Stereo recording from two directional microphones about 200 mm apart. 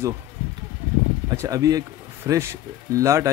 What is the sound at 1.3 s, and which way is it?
Speech, 15° right (ahead or behind).